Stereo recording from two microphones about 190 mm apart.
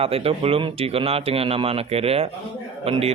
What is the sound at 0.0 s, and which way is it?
Speech, 30° right (ahead or behind).